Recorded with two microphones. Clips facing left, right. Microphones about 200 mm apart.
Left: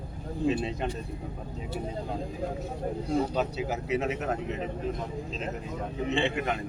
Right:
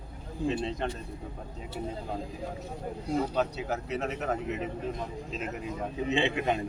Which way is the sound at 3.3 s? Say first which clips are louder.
Even; 5° left (ahead or behind).